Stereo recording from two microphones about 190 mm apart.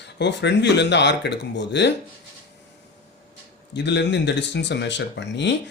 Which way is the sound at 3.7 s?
65° left (ahead or behind).